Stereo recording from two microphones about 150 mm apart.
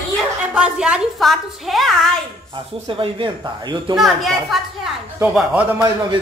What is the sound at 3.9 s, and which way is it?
A woman's voice, centre (ahead or behind).